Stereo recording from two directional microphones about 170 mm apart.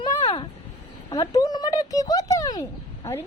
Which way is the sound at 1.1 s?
20° left (ahead or behind).